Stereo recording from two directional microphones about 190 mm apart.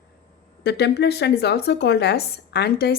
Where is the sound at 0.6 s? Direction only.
60° left (ahead or behind).